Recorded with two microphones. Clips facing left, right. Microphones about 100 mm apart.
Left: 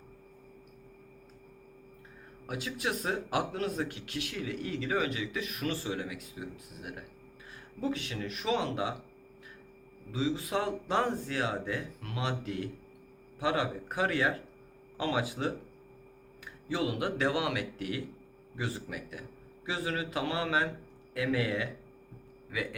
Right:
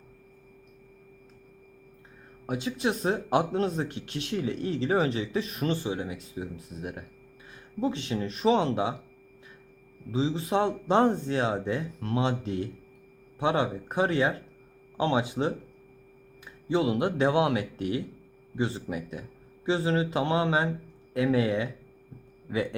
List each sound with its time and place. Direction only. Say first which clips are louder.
2.5 s speech: right 6 dB; 25° right (ahead or behind)
10.1 s speech: right 4 dB; 25° right (ahead or behind)
16.6 s speech: right 6 dB; 25° right (ahead or behind)